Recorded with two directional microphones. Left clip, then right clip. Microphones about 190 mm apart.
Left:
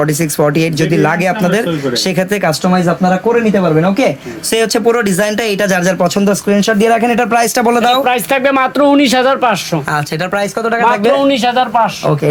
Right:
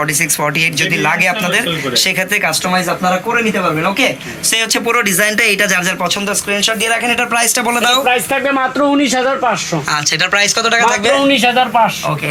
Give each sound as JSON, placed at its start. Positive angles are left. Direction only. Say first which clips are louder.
{"t": 0.5, "sound": "speech", "louder": "left 1 dB", "side_deg": 50}
{"t": 4.5, "sound": "speech", "louder": "left 3 dB", "side_deg": 50}
{"t": 8.0, "sound": "a man's voice", "louder": "left 1 dB", "side_deg": 15}
{"t": 8.4, "sound": "a man's voice", "louder": "left 5 dB", "side_deg": 30}
{"t": 9.9, "sound": "speech", "louder": "right 4 dB", "side_deg": 40}
{"t": 11.1, "sound": "a man's voice", "louder": "even", "side_deg": 10}